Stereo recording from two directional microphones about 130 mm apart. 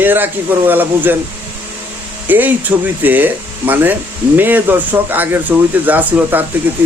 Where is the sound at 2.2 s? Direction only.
15° right (ahead or behind).